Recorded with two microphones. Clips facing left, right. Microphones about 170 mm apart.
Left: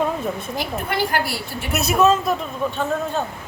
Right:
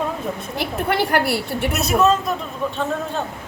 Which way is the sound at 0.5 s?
65° right (ahead or behind).